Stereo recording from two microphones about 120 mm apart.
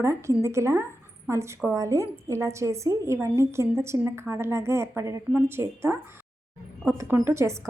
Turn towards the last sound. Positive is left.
turn(degrees=-25)  # may be behind; listen again after turning